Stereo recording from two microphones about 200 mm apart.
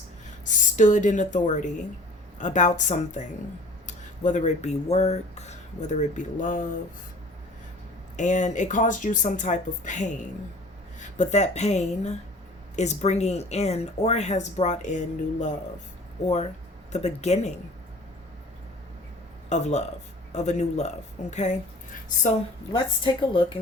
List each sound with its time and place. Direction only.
0.3 s speech: 40° left (ahead or behind)
8.1 s speech: 40° left (ahead or behind)
16.2 s speech: 35° left (ahead or behind)
19.5 s speech: 35° left (ahead or behind)
22.7 s a woman's voice: 25° left (ahead or behind)